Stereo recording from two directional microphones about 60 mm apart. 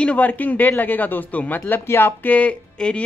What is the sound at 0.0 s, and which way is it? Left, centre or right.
Speech, left.